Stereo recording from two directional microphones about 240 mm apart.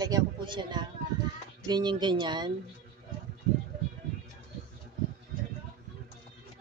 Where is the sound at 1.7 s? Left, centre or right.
Centre.